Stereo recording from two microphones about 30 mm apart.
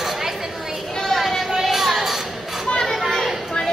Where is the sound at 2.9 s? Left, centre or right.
Centre.